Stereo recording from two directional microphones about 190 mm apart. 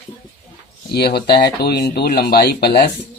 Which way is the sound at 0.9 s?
55° left (ahead or behind).